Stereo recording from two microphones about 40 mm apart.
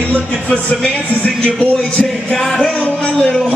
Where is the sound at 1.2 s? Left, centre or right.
Left.